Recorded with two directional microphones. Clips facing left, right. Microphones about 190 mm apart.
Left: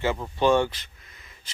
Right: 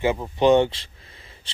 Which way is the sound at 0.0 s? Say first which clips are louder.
Right 4 dB; 20° right (ahead or behind).